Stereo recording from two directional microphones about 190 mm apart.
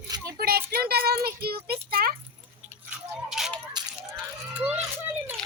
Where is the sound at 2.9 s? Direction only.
Centre (ahead or behind).